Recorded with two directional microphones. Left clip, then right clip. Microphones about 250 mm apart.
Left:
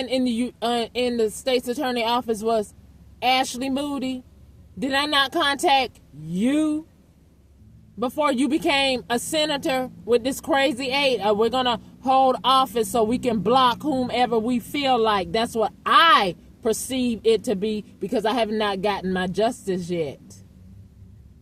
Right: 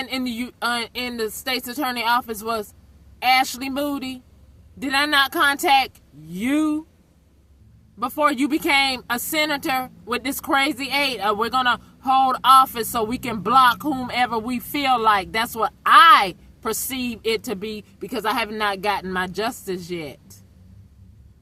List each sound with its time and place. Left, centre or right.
0.0 s speech: right
7.9 s a woman's voice: right